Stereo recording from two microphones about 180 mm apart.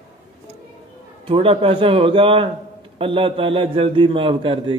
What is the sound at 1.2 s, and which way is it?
A man's voice, 30° right (ahead or behind).